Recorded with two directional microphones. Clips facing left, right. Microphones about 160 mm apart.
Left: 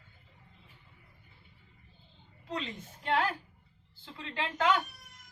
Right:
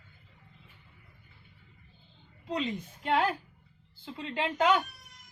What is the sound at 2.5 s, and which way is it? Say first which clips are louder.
A woman's voice: right 5 dB; 15° right (ahead or behind).